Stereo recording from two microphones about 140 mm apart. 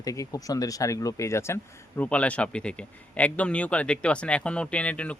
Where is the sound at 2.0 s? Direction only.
10° left (ahead or behind).